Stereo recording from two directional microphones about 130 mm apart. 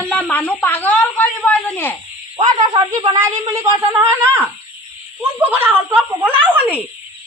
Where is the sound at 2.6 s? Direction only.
35° right (ahead or behind).